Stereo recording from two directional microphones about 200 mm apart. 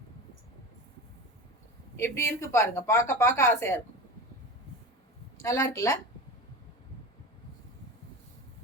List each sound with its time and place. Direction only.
2.0 s a woman's voice: 15° left (ahead or behind)
5.4 s a woman's voice: 15° left (ahead or behind)